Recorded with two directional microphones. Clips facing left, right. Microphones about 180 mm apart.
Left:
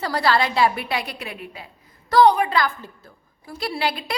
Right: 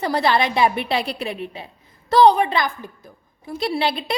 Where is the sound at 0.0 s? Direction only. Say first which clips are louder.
Right 2 dB; 20° right (ahead or behind).